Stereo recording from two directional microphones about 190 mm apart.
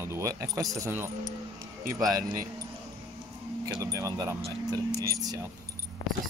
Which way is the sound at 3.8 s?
15° right (ahead or behind).